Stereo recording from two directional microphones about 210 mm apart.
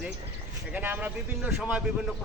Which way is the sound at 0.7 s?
10° right (ahead or behind).